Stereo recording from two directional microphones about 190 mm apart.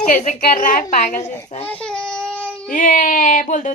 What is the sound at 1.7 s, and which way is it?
Child singing, 5° left (ahead or behind).